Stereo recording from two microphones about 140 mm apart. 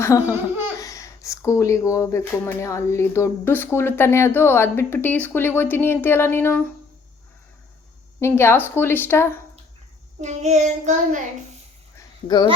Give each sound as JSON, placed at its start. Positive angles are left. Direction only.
{"t": 0.0, "sound": "laughter", "side_deg": 20}
{"t": 0.8, "sound": "speech", "side_deg": 25}
{"t": 8.2, "sound": "speech", "side_deg": 15}
{"t": 10.2, "sound": "child singing", "side_deg": -55}
{"t": 11.9, "sound": "a sound", "side_deg": 30}